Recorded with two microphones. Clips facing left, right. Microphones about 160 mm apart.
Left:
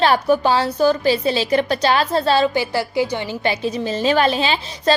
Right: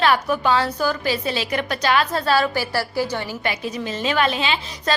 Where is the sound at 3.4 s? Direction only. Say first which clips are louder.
Left 5 dB; 30° left (ahead or behind).